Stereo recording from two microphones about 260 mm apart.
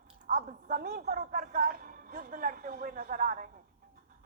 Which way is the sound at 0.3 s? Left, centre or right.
Right.